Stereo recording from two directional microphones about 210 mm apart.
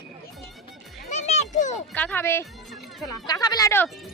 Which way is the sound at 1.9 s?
10° left (ahead or behind).